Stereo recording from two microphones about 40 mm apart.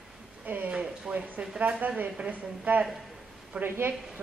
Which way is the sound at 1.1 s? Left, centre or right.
Centre.